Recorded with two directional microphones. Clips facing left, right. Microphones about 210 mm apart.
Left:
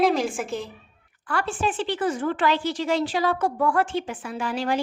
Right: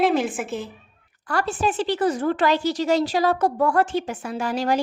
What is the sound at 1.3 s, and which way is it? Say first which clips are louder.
Speech: right 3 dB; 40° right (ahead or behind).